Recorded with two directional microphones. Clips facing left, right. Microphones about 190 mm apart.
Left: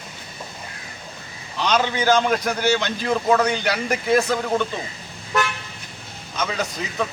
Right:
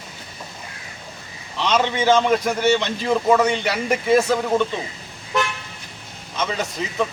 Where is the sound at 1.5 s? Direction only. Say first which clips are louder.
Right 1 dB; centre (ahead or behind).